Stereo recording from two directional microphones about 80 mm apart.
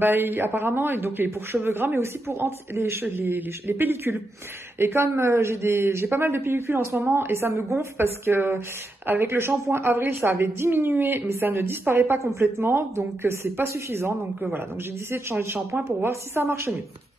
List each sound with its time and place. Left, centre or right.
0.0 s a man's voice: right